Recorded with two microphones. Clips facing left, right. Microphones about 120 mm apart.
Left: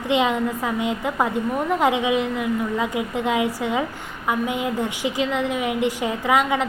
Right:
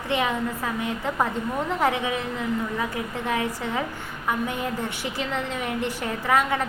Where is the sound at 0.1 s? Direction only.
20° left (ahead or behind).